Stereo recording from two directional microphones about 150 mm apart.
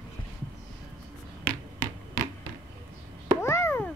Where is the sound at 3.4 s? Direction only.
15° left (ahead or behind).